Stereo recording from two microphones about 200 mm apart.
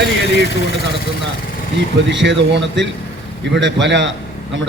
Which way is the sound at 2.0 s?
65° right (ahead or behind).